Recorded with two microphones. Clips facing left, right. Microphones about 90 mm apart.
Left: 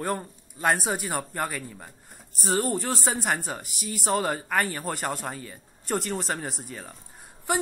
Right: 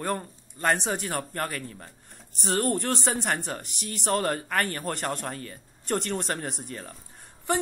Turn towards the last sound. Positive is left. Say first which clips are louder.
# even
turn(degrees=5)  # may be behind; listen again after turning